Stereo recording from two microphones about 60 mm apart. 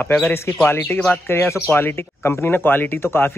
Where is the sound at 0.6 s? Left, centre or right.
Left.